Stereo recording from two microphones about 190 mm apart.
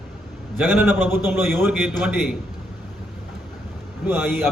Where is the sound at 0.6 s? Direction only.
10° right (ahead or behind).